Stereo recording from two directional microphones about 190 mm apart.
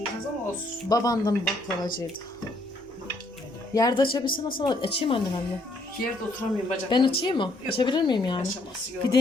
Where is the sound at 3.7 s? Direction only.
20° left (ahead or behind).